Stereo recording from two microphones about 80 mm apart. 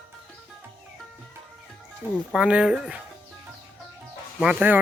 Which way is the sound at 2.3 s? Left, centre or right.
Centre.